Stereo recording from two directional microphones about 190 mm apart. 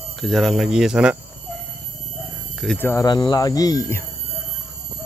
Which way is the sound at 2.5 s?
5° left (ahead or behind).